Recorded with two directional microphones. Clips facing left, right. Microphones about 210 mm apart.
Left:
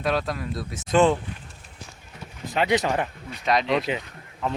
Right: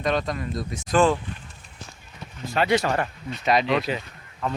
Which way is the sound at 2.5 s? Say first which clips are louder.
Right 1 dB; 15° left (ahead or behind).